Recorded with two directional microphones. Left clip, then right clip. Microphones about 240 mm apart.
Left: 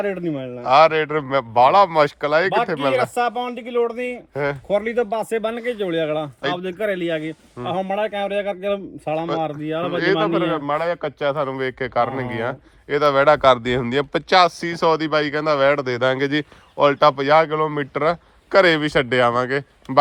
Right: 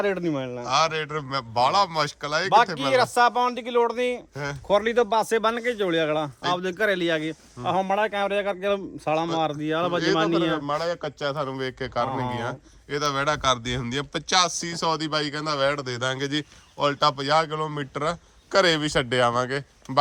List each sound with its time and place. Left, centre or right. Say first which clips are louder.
0.1 s speech: left 1 dB; right
0.3 s a man's voice: left 9 dB; centre
3.5 s speech: left 1 dB; right
4.4 s a man's voice: left 4 dB; centre
6.9 s speech: left 1 dB; right
7.6 s a man's voice: left 1 dB; centre
10.5 s a man's voice: left 5 dB; centre